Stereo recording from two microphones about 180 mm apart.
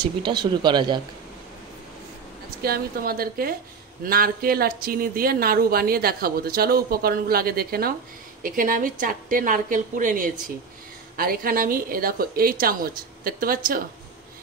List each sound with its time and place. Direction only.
0.0 s speech: 25° right (ahead or behind)
2.6 s a woman's voice: 55° right (ahead or behind)